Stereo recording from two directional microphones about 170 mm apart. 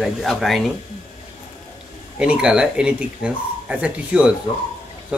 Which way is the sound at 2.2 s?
5° right (ahead or behind).